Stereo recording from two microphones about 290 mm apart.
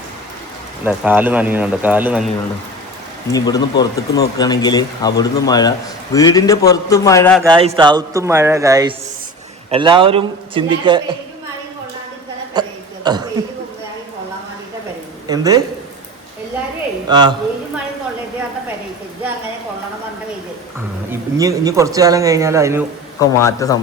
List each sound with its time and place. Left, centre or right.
0.9 s speech: centre
3.3 s speech: centre
7.4 s speech: centre
12.6 s speech: centre
15.3 s speech: centre
17.1 s speech: centre
21.1 s speech: centre
23.2 s speech: centre